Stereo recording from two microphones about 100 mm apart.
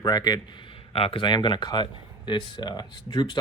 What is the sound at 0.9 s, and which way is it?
Speech, 65° left (ahead or behind).